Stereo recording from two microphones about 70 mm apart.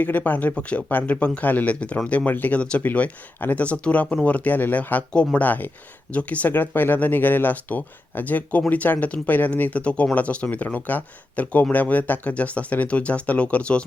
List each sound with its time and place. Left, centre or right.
0.0 s speech: left